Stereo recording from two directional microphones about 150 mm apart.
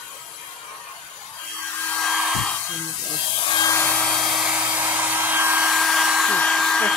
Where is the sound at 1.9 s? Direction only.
5° left (ahead or behind).